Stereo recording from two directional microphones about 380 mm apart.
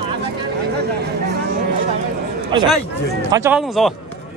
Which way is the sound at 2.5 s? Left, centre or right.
Centre.